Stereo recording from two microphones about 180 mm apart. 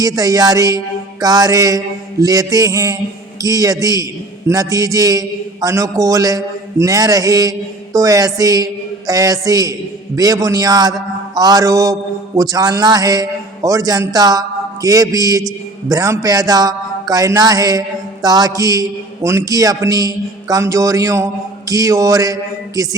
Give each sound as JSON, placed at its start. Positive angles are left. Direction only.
{"t": 0.0, "sound": "speech", "side_deg": -20}